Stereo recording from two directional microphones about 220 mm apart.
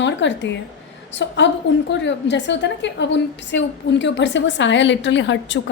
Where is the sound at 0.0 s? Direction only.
55° left (ahead or behind).